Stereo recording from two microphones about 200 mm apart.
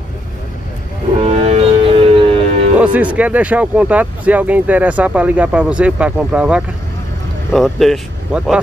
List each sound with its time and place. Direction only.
1.2 s music: 30° right (ahead or behind)
2.8 s speech: 5° right (ahead or behind)